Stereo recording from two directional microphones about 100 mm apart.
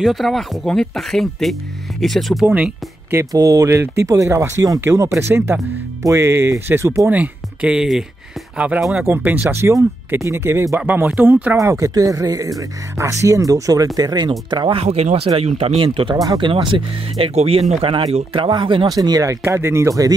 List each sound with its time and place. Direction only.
0.0 s speech: centre (ahead or behind)
2.4 s speech: 15° right (ahead or behind)
3.2 s speech: 35° right (ahead or behind)
7.1 s speech: 10° right (ahead or behind)
11.5 s speech: 30° right (ahead or behind); by 14.8 s 50° right (ahead or behind)
14.8 s speech: 85° right
15.8 s speech: 60° right (ahead or behind)
16.2 s speech: 50° right (ahead or behind)
17.3 s speech: 90° right; by 18.4 s 75° right (ahead or behind)
18.4 s speech: 55° right (ahead or behind)
18.9 s speech: 40° right (ahead or behind)
19.4 s speech: 25° right (ahead or behind)